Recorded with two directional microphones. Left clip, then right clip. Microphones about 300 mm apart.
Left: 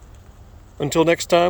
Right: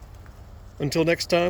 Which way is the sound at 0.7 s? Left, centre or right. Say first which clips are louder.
Left 5 dB; centre.